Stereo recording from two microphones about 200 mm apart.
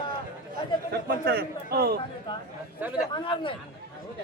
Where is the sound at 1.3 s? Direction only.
50° right (ahead or behind).